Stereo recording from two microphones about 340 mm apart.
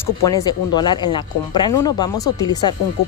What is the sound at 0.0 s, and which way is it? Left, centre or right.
Speech, centre.